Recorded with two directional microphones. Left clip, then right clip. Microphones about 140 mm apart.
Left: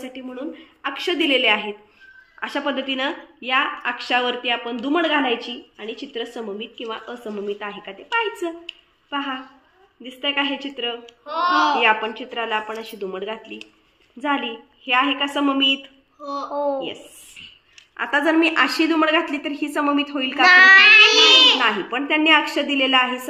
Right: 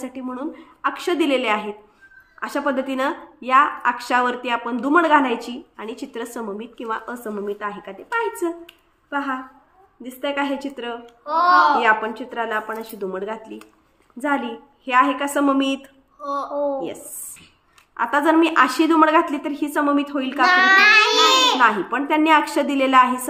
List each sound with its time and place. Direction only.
0.0 s a woman's voice: 50° right (ahead or behind)
2.4 s a woman's voice: 20° right (ahead or behind); by 15.9 s 35° right (ahead or behind)
16.5 s a woman's voice: 25° left (ahead or behind)
17.9 s a woman's voice: 25° right (ahead or behind)
20.4 s child singing: 15° left (ahead or behind)
21.5 s a woman's voice: 30° right (ahead or behind)